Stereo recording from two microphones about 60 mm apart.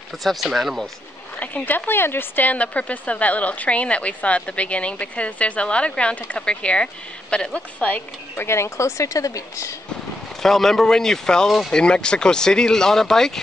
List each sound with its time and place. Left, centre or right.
0.2 s speech: centre
1.4 s speech: left
8.4 s speech: left
10.4 s speech: centre